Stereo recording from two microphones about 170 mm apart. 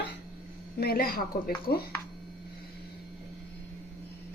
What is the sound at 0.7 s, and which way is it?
A woman's voice, 60° left (ahead or behind).